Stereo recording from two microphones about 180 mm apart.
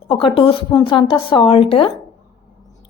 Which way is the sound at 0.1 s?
30° left (ahead or behind).